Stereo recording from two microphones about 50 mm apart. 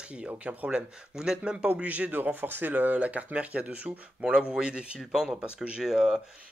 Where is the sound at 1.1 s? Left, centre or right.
Centre; by 2.7 s right.